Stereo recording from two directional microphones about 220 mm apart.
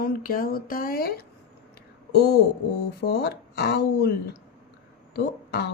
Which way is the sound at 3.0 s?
45° left (ahead or behind).